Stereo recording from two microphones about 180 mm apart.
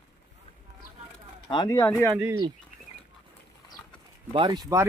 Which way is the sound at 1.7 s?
15° left (ahead or behind).